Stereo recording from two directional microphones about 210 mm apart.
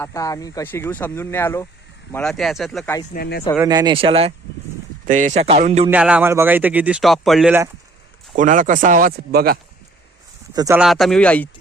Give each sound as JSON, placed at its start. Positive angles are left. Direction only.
{"t": 0.0, "sound": "speech", "side_deg": 15}
{"t": 3.1, "sound": "speech", "side_deg": 50}
{"t": 3.6, "sound": "speech", "side_deg": -20}
{"t": 5.9, "sound": "speech", "side_deg": -5}
{"t": 8.4, "sound": "speech", "side_deg": -40}
{"t": 10.5, "sound": "speech", "side_deg": -20}
{"t": 10.8, "sound": "speech", "side_deg": 0}